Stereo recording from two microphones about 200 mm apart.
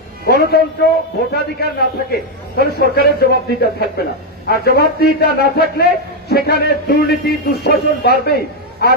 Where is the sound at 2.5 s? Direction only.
55° left (ahead or behind).